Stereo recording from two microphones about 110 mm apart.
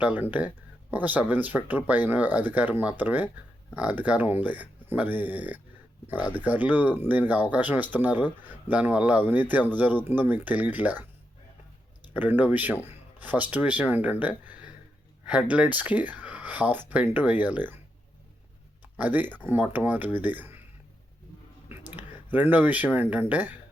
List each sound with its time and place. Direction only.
0.0 s speech: 15° right (ahead or behind)
12.1 s speech: 15° right (ahead or behind)
18.9 s speech: 15° right (ahead or behind)
21.7 s speech: 15° right (ahead or behind)